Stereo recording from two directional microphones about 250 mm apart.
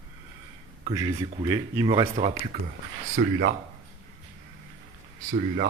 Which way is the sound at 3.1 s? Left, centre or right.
Right.